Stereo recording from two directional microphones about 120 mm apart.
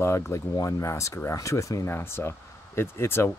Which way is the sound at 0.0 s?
25° left (ahead or behind).